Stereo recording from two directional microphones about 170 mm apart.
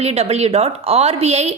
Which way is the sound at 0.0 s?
40° right (ahead or behind).